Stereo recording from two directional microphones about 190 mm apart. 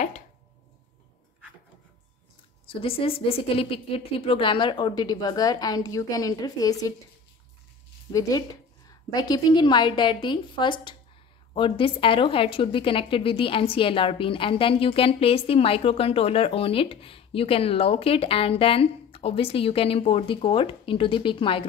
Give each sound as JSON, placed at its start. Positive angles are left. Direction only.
{"t": 2.7, "sound": "a woman's voice", "side_deg": 30}
{"t": 8.1, "sound": "a woman's voice", "side_deg": 20}